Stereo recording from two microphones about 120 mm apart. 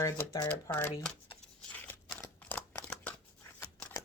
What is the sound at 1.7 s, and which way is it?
Scissors, 10° left (ahead or behind).